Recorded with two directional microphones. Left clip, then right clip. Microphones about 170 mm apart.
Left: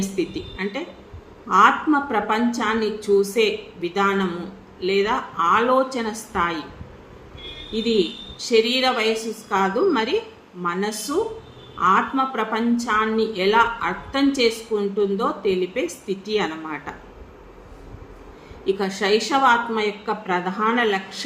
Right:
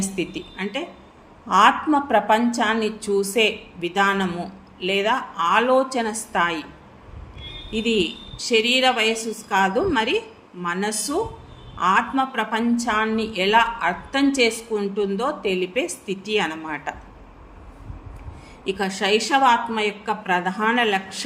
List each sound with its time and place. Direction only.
0.2 s a woman's voice: 45° right (ahead or behind)
7.7 s a woman's voice: 45° right (ahead or behind)
18.6 s a woman's voice: 45° right (ahead or behind)